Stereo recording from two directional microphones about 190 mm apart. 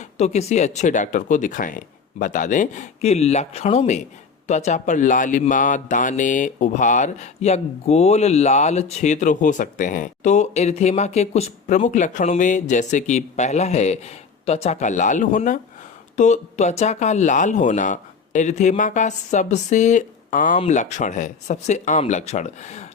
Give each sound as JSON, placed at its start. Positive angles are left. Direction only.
{"t": 0.0, "sound": "speech", "side_deg": 35}